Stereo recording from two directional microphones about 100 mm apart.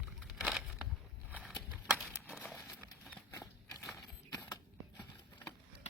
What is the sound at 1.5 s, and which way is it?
Horse, centre (ahead or behind).